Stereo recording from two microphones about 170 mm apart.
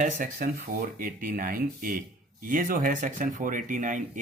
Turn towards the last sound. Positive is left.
turn(degrees=-50)  # may be behind; listen again after turning